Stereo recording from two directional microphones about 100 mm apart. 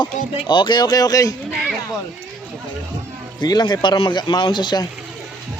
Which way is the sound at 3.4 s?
45° left (ahead or behind).